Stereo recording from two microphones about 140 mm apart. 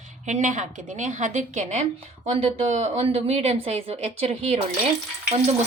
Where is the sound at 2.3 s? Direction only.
45° right (ahead or behind).